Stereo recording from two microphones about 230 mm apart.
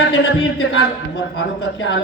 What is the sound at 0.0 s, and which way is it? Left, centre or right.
A man's voice, left.